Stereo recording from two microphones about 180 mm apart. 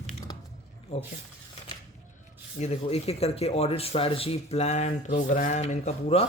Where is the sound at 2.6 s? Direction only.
35° left (ahead or behind).